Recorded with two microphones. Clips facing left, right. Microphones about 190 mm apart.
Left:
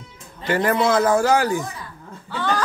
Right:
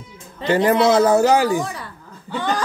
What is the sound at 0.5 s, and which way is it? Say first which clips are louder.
A man's voice: right 4 dB; 20° right (ahead or behind).